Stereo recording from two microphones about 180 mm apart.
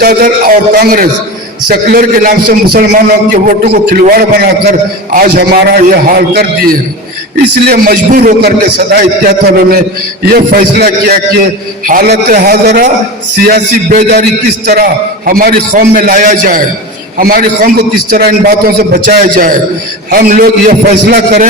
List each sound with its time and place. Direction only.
0.0 s a man's voice: 55° right (ahead or behind)
15.3 s a man's voice: 50° right (ahead or behind)